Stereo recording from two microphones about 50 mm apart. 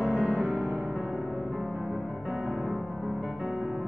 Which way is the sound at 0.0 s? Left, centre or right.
Right.